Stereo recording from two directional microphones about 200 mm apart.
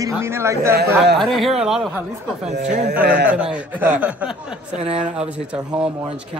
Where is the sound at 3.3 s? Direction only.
5° right (ahead or behind).